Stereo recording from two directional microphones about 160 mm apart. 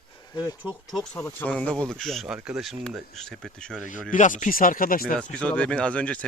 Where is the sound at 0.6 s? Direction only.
Centre (ahead or behind).